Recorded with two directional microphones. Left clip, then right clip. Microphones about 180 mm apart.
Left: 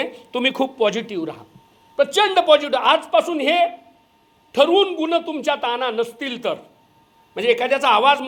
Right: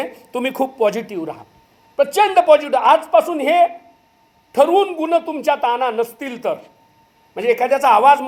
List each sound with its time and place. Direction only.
0.6 s a man's voice: 15° left (ahead or behind)